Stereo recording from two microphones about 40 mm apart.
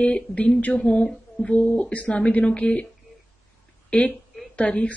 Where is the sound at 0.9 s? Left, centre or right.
Left.